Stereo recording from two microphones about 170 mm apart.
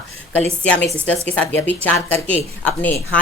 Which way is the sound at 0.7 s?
5° left (ahead or behind).